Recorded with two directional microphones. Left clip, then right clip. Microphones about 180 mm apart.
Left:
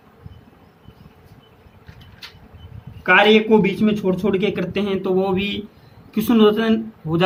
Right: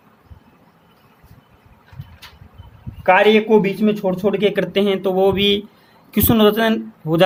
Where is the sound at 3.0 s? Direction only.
60° right (ahead or behind).